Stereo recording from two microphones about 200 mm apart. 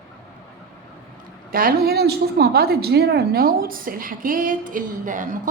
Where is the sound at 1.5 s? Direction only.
50° right (ahead or behind).